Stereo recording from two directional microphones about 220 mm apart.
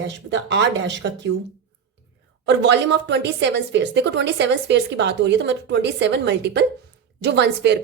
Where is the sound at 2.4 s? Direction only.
55° right (ahead or behind).